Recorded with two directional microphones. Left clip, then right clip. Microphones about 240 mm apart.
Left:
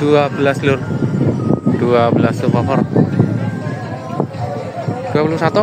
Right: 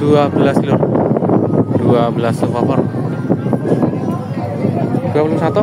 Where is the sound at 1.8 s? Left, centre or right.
Centre.